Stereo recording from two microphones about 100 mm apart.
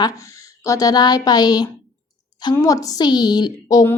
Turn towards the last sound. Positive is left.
turn(degrees=45)  # may be behind; listen again after turning